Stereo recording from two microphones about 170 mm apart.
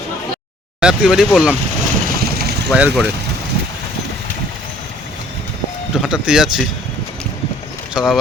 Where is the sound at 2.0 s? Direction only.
65° right (ahead or behind).